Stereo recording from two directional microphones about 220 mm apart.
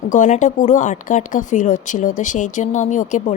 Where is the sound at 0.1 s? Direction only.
35° left (ahead or behind).